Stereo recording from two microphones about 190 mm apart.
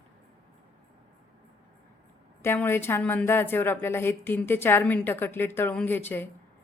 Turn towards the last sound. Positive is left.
turn(degrees=10)  # may be behind; listen again after turning